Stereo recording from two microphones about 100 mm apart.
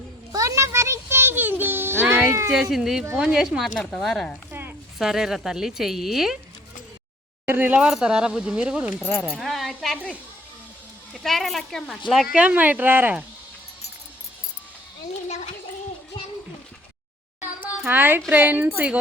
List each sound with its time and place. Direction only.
0.3 s music: 30° right (ahead or behind)
2.5 s speech: centre (ahead or behind)
3.8 s speech: 10° left (ahead or behind)
7.4 s speech: 20° right (ahead or behind)
9.0 s speech: 20° left (ahead or behind)
9.3 s speech: centre (ahead or behind)
11.2 s speech: centre (ahead or behind); by 13.2 s 20° right (ahead or behind)
17.4 s a sound: 20° right (ahead or behind)
18.3 s speech: 15° right (ahead or behind)